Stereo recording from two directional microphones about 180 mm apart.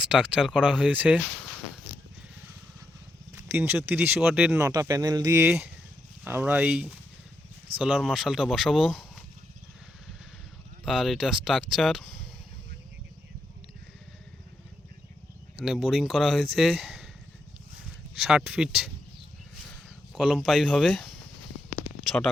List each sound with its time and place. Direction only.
0.0 s speech: 5° right (ahead or behind)
3.3 s a sound: 10° right (ahead or behind)
3.8 s speech: 10° right (ahead or behind)
4.7 s speech: 20° right (ahead or behind); by 9.2 s centre (ahead or behind)
10.8 s speech: centre (ahead or behind)
15.6 s speech: centre (ahead or behind)
18.2 s speech: 5° right (ahead or behind)
20.1 s speech: centre (ahead or behind)